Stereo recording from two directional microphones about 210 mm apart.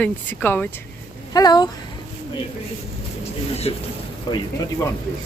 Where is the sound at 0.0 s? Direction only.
10° left (ahead or behind).